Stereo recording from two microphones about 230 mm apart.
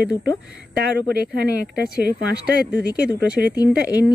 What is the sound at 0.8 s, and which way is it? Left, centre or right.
Speech, right.